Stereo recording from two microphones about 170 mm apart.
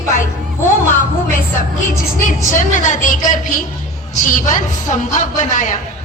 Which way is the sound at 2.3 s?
50° left (ahead or behind).